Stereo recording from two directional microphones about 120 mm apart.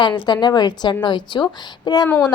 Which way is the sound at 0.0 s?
40° left (ahead or behind).